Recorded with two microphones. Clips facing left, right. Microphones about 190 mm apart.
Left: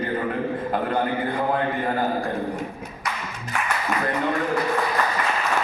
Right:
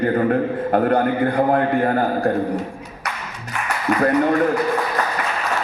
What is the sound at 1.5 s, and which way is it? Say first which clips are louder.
Speech: right 6 dB; 65° right (ahead or behind).